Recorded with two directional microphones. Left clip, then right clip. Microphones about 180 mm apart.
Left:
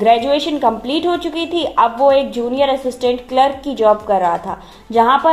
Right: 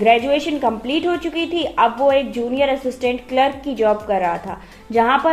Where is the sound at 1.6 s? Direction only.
25° left (ahead or behind).